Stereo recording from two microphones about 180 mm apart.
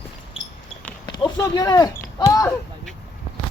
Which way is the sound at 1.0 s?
25° left (ahead or behind).